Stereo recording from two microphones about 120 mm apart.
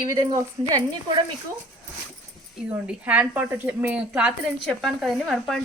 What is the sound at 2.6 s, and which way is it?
A woman's voice, 10° right (ahead or behind).